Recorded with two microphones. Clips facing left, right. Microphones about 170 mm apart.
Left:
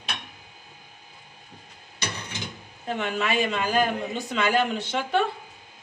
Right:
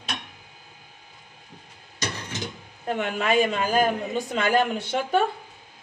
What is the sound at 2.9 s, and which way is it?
A man's voice, 50° right (ahead or behind).